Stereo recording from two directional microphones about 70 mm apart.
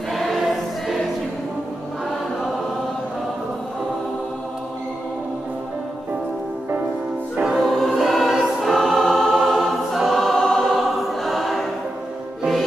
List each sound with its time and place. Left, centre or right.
0.1 s choir: centre
7.5 s choir: centre